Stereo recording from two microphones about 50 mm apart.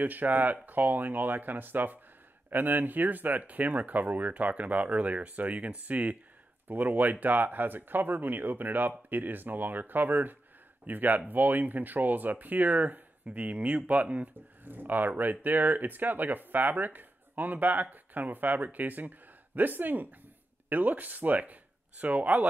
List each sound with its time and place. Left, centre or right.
0.0 s speech: right
14.3 s speech: right